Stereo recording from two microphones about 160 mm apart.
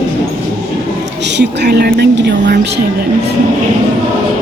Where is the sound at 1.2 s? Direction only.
90° right.